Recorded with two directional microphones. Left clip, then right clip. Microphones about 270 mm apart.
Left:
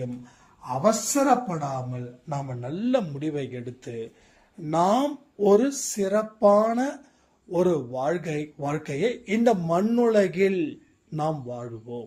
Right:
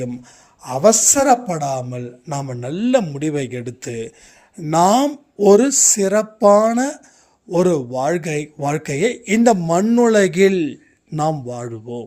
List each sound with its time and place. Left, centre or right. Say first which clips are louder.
0.6 s speech: right 9 dB; right